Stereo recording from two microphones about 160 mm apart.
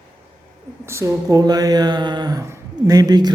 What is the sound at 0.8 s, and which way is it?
Speech, 15° right (ahead or behind).